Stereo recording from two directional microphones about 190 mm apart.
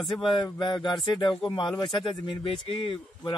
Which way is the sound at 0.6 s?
25° left (ahead or behind).